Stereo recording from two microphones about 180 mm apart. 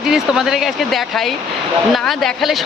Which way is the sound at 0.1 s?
Centre (ahead or behind).